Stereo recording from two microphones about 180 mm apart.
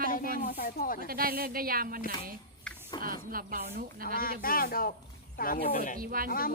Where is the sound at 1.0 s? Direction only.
55° right (ahead or behind).